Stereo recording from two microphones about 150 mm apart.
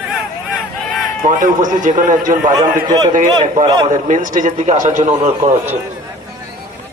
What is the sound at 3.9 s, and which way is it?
A man's voice, 60° right (ahead or behind).